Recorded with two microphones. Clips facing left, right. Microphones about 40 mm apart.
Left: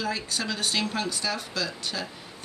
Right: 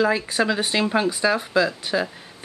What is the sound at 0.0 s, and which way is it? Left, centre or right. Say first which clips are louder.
Speech: right 10 dB; right.